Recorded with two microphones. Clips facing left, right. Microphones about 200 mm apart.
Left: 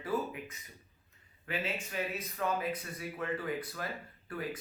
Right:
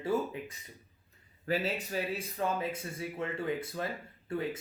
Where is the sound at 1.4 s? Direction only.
35° right (ahead or behind).